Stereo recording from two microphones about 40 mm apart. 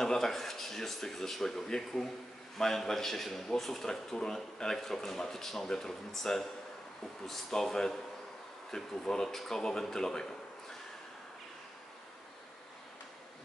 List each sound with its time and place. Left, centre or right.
0.0 s speech: centre